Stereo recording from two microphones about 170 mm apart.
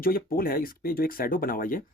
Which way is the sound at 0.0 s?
60° left (ahead or behind).